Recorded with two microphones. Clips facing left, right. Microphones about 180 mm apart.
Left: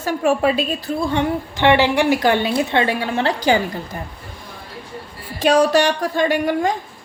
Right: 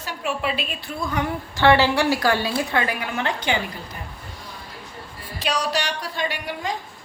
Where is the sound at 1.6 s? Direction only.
15° left (ahead or behind); by 3.6 s 40° left (ahead or behind).